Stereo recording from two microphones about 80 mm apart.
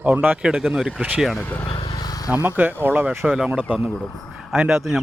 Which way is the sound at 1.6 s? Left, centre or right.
Left.